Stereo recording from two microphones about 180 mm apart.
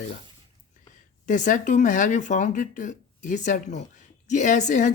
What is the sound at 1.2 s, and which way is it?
Speech, 45° left (ahead or behind).